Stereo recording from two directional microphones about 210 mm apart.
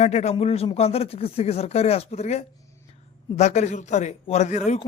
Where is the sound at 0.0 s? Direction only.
30° left (ahead or behind).